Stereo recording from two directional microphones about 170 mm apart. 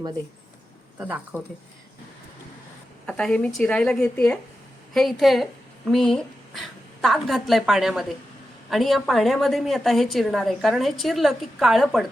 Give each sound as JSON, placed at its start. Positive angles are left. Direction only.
{"t": 0.9, "sound": "speech", "side_deg": -10}
{"t": 3.1, "sound": "a woman's voice", "side_deg": 5}